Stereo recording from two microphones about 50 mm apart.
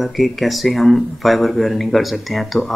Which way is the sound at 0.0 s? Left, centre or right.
Centre.